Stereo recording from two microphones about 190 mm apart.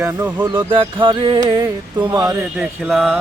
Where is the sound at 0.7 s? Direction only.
25° right (ahead or behind).